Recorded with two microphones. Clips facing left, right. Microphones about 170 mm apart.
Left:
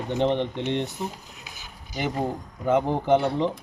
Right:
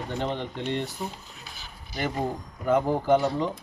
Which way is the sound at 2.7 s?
20° left (ahead or behind).